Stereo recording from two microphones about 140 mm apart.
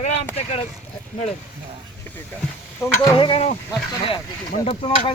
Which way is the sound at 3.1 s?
40° left (ahead or behind).